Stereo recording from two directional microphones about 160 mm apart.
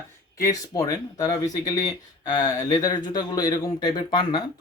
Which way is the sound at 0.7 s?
25° left (ahead or behind).